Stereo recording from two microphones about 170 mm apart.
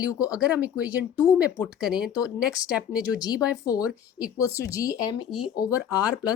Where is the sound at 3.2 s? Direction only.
20° left (ahead or behind).